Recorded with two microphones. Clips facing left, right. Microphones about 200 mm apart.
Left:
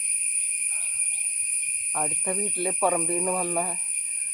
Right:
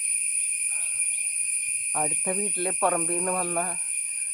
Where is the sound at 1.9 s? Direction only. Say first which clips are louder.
Right 1 dB; 5° right (ahead or behind).